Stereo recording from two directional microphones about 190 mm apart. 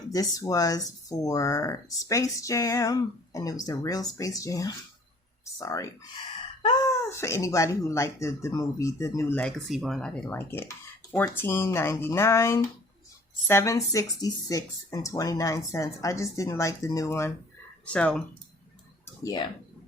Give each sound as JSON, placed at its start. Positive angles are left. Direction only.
{"t": 0.1, "sound": "speech", "side_deg": 20}